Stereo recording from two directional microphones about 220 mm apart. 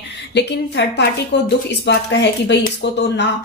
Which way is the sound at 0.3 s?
50° left (ahead or behind).